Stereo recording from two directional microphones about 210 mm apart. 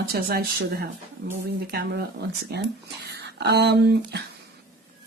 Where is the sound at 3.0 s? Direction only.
50° right (ahead or behind).